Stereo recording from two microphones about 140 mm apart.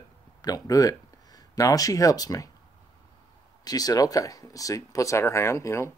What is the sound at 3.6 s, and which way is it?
Speech, 25° left (ahead or behind).